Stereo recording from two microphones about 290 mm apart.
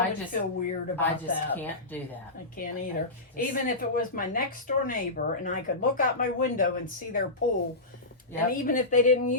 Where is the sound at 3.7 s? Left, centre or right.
Left.